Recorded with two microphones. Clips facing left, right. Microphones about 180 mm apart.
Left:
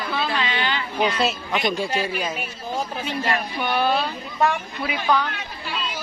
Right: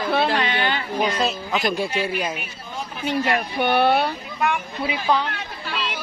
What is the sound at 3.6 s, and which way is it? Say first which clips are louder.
Speech: right 5 dB; 60° right (ahead or behind).